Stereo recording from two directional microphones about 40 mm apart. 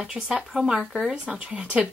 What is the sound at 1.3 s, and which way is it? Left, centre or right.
Speech, right.